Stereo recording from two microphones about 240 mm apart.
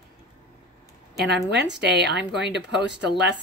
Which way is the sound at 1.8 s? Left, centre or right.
Right.